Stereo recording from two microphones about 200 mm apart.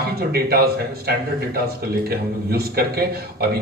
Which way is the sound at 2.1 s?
50° right (ahead or behind).